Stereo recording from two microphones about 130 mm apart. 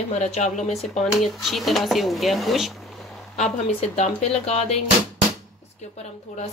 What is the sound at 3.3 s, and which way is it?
Speech, 60° left (ahead or behind).